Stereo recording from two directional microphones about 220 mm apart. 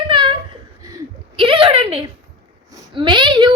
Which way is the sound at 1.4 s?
25° right (ahead or behind).